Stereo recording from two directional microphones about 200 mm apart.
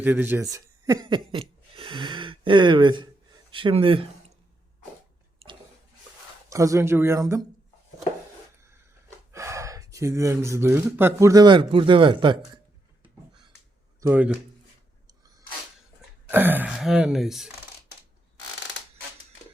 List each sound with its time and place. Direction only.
0.0 s speech: 10° right (ahead or behind); by 4.0 s 25° right (ahead or behind)
5.4 s a sound: 30° right (ahead or behind)
6.5 s speech: 15° right (ahead or behind)
9.3 s speech: 15° right (ahead or behind)
14.0 s speech: 10° right (ahead or behind)
16.3 s speech: 10° right (ahead or behind)